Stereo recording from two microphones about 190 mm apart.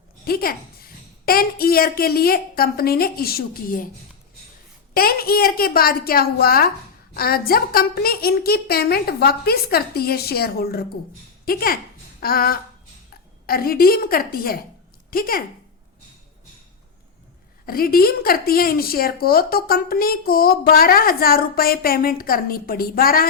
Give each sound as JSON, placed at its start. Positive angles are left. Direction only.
{"t": 0.3, "sound": "speech", "side_deg": 50}
{"t": 4.9, "sound": "a woman's voice", "side_deg": 50}
{"t": 17.7, "sound": "speech", "side_deg": 50}